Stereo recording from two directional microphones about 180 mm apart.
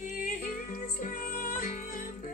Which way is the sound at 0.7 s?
50° left (ahead or behind).